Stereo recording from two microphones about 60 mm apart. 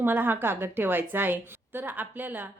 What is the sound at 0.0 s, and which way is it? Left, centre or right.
A woman's voice, right.